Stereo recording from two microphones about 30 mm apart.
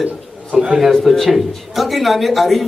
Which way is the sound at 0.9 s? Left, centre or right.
Centre.